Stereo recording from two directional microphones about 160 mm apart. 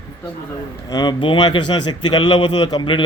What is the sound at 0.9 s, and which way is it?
Speech, 25° left (ahead or behind).